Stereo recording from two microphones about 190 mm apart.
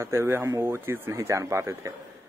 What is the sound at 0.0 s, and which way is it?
Speech, 15° right (ahead or behind).